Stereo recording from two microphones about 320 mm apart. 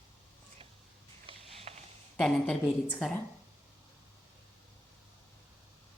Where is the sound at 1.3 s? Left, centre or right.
Centre.